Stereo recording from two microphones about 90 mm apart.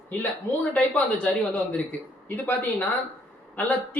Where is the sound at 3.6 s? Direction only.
15° left (ahead or behind).